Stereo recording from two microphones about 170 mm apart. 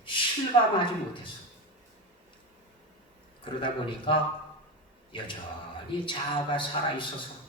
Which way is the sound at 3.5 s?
30° left (ahead or behind).